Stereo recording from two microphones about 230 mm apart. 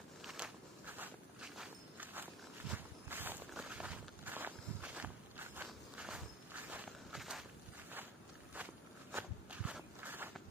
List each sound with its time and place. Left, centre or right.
0.2 s walk: centre
8.6 s walk: centre